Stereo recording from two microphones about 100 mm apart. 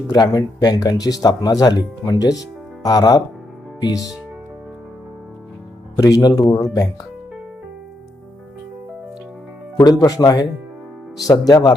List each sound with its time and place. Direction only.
0.1 s speech: 40° left (ahead or behind)
6.0 s speech: 35° left (ahead or behind)
9.8 s speech: 40° left (ahead or behind)